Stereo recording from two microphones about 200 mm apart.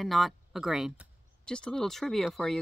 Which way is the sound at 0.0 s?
Centre (ahead or behind).